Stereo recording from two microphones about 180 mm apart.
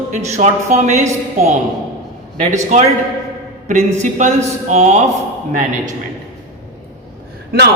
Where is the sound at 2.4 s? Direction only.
40° right (ahead or behind).